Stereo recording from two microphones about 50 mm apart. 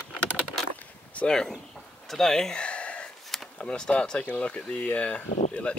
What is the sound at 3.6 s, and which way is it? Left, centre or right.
Speech, left.